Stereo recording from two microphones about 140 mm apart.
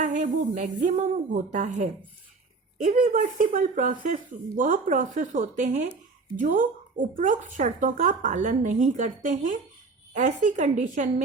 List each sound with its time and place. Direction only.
0.0 s speech: 60° right (ahead or behind)
2.7 s speech: 70° right (ahead or behind)